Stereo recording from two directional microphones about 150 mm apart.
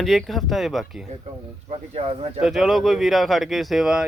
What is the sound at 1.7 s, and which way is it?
Speech, 40° right (ahead or behind).